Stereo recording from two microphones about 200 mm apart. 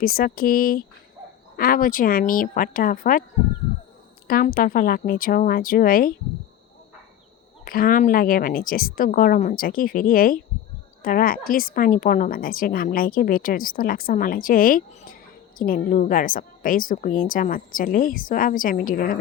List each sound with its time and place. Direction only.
0.0 s a woman's voice: 50° left (ahead or behind)
4.3 s a woman's voice: 45° left (ahead or behind)
7.6 s a woman's voice: 45° left (ahead or behind)